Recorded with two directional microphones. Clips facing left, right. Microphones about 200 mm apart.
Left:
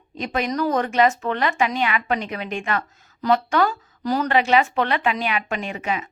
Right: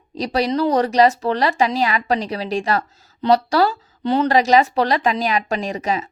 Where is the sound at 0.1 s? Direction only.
35° right (ahead or behind).